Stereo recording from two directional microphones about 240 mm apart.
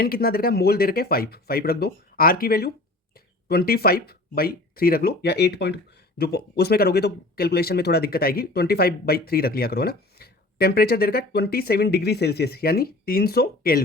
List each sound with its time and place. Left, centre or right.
0.0 s speech: left